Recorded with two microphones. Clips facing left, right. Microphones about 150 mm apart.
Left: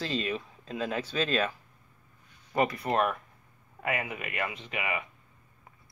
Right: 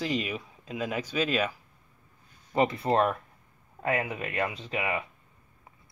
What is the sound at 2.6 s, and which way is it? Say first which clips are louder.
Speech: right 3 dB; 25° right (ahead or behind).